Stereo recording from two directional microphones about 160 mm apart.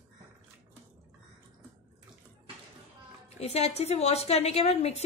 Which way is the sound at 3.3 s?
40° left (ahead or behind).